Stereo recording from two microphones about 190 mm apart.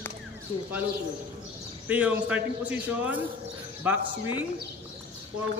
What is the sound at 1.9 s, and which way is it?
A man's voice, 10° right (ahead or behind).